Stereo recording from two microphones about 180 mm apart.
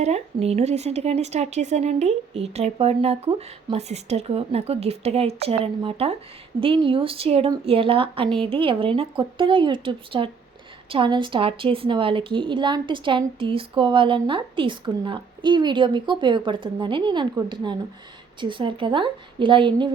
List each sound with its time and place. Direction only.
0.0 s a woman's voice: 35° right (ahead or behind)